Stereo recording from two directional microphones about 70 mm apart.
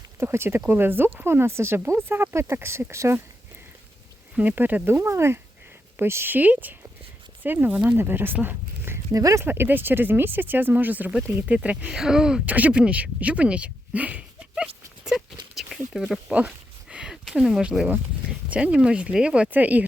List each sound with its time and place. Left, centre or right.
0.2 s speech: right
4.4 s speech: right
9.1 s speech: right
9.4 s speech: right
11.9 s speech: centre
12.5 s a sound: right
18.3 s speech: centre